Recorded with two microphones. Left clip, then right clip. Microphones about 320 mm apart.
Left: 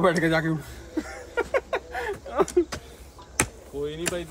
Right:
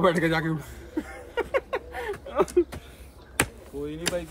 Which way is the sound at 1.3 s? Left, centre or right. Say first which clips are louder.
Left 1 dB; centre.